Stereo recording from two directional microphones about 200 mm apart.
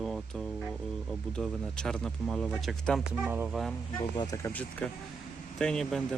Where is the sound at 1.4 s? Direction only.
5° left (ahead or behind).